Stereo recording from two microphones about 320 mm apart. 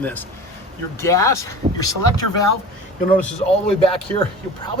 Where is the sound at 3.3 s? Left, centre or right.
Centre.